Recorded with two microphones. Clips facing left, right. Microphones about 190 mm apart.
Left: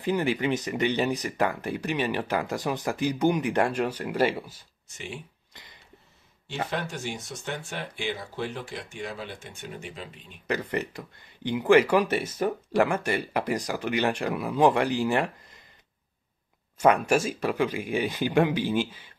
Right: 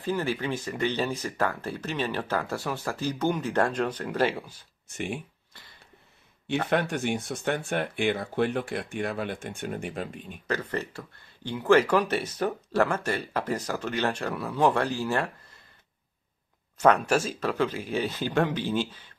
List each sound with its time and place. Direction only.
0.0 s speech: 15° left (ahead or behind)
4.8 s speech: 55° right (ahead or behind)
5.5 s a sound: 15° left (ahead or behind)
6.7 s speech: 60° right (ahead or behind)
10.4 s speech: 15° left (ahead or behind)
16.7 s speech: 10° left (ahead or behind)